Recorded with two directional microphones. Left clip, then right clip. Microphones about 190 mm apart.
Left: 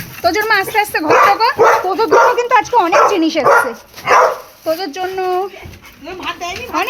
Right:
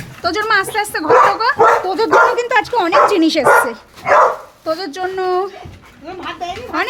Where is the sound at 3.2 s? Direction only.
20° right (ahead or behind).